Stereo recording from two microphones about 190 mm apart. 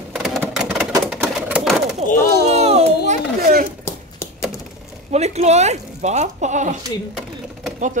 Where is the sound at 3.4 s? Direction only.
50° right (ahead or behind).